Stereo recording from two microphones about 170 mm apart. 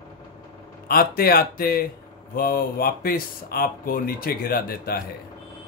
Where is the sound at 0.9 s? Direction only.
60° left (ahead or behind).